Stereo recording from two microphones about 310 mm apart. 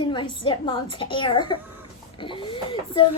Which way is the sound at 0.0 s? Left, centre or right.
Centre.